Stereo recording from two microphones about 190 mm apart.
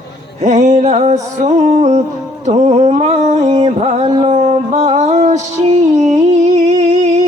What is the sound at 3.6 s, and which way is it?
Music, 35° right (ahead or behind).